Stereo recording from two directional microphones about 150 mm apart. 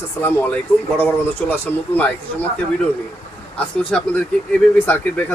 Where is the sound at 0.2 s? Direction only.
15° left (ahead or behind).